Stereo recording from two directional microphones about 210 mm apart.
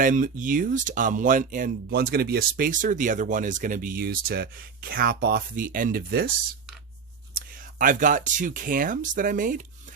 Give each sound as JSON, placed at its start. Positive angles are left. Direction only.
{"t": 0.0, "sound": "speech", "side_deg": -40}
{"t": 7.3, "sound": "speech", "side_deg": -40}